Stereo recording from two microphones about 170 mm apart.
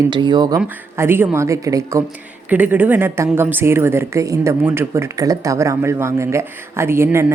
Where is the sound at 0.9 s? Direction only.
15° right (ahead or behind).